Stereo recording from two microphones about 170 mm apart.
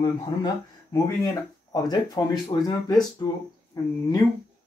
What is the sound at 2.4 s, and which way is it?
Speech, 25° left (ahead or behind).